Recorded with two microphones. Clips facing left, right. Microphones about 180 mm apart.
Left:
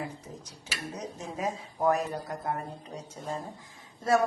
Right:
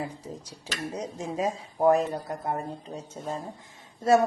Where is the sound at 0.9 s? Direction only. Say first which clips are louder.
Right 6 dB; 30° right (ahead or behind).